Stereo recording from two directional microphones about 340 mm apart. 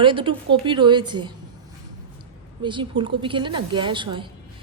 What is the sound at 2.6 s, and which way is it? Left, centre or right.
Speech, centre.